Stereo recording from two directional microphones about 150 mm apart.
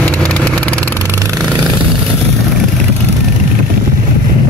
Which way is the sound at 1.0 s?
20° right (ahead or behind).